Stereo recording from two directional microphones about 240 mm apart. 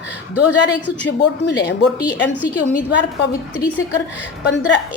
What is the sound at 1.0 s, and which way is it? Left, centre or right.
Speech, left.